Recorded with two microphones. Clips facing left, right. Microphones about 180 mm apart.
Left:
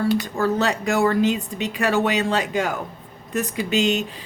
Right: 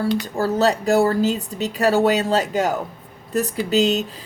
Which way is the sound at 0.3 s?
35° right (ahead or behind).